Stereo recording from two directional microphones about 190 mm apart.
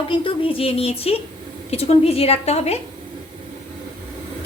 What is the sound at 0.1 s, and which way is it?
A woman's voice, 30° left (ahead or behind).